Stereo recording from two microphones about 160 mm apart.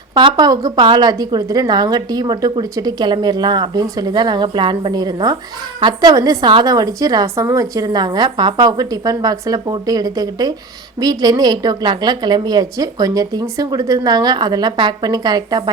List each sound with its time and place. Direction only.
0.1 s a woman's voice: 25° right (ahead or behind)